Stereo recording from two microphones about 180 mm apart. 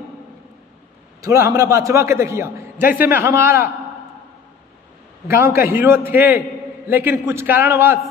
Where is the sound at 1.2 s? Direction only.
15° right (ahead or behind).